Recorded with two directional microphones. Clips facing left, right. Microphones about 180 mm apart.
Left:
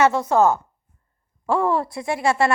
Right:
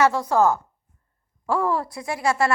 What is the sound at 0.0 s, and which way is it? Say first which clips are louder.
A woman's voice: left 2 dB; 25° left (ahead or behind).